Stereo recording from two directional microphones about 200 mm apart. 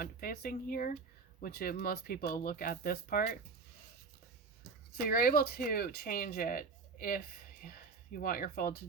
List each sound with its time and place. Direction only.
0.0 s speech: 45° left (ahead or behind)
4.9 s speech: 45° left (ahead or behind)
8.2 s speech: 45° left (ahead or behind)